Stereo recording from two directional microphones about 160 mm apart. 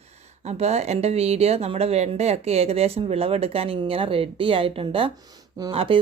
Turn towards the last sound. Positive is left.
turn(degrees=-30)  # may be behind; listen again after turning